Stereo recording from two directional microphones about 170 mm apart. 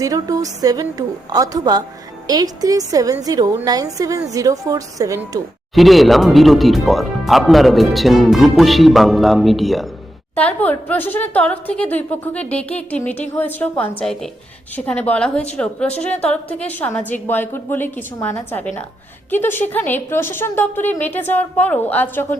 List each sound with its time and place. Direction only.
0.0 s a woman's voice: 20° right (ahead or behind)
5.7 s a woman's voice: centre (ahead or behind)